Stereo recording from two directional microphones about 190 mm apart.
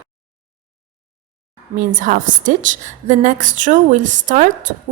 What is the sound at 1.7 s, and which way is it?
A woman's voice, 45° right (ahead or behind).